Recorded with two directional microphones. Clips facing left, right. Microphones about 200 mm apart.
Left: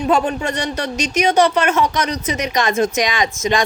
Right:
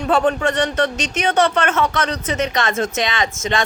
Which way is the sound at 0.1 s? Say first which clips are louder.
Right 2 dB; 10° left (ahead or behind).